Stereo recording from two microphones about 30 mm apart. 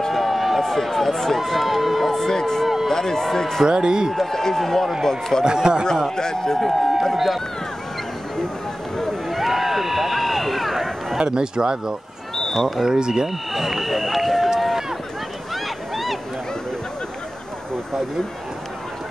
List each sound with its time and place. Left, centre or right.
0.1 s run: centre
0.7 s speech: centre
2.1 s speech: centre
3.6 s speech: right
4.1 s a man's voice: centre
5.4 s speech: right
6.0 s a man's voice: centre
6.6 s speech: centre
9.3 s run: centre
11.1 s speech: right
12.4 s a sound: centre
12.8 s speech: right
13.5 s run: centre
15.5 s boat: centre